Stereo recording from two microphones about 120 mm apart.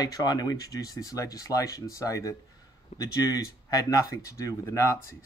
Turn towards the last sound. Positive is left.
turn(degrees=25)  # may be behind; listen again after turning